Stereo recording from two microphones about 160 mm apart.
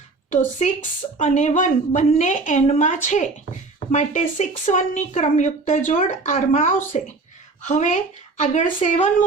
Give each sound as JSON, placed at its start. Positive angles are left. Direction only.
{"t": 0.3, "sound": "a woman's voice", "side_deg": 55}